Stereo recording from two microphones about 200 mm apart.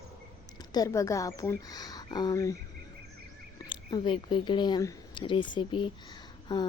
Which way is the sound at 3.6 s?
25° left (ahead or behind).